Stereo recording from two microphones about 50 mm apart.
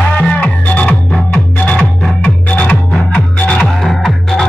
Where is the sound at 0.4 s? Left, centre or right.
Left.